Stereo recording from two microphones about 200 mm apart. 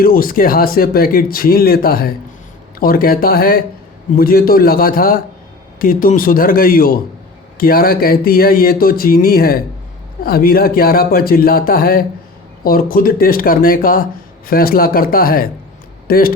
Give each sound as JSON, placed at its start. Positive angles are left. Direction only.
{"t": 0.0, "sound": "speech", "side_deg": 45}